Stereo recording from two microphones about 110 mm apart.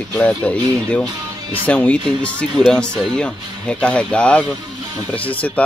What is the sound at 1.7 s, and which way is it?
Speech, 10° left (ahead or behind).